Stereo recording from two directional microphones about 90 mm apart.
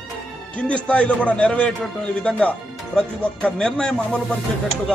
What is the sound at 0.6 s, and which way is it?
Speech, 15° left (ahead or behind).